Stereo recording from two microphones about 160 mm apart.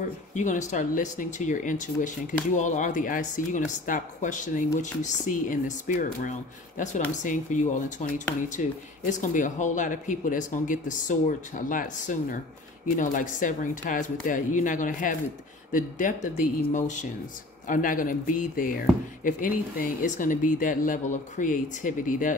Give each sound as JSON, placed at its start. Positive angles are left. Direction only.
{"t": 0.3, "sound": "speech", "side_deg": 50}